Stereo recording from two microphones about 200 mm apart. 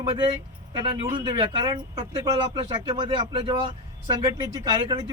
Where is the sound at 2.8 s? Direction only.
25° right (ahead or behind).